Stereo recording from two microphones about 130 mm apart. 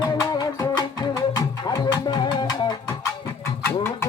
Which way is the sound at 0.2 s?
30° left (ahead or behind).